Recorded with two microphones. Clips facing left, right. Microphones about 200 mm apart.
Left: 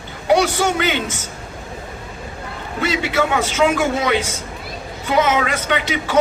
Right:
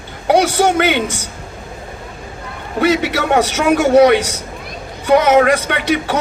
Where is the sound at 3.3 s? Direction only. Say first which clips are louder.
Right 7 dB; 45° right (ahead or behind).